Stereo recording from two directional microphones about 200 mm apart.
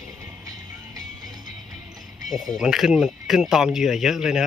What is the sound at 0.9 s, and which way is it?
Music, 20° right (ahead or behind).